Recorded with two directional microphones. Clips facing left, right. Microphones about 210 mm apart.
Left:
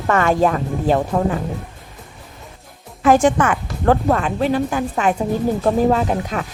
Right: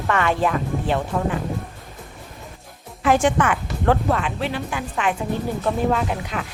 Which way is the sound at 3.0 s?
40° left (ahead or behind).